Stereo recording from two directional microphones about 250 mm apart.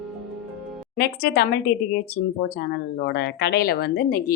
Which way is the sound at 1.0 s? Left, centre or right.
Left.